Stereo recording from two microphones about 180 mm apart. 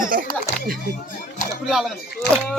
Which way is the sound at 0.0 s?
50° right (ahead or behind).